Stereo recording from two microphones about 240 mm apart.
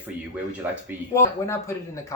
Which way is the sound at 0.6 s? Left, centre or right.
Centre.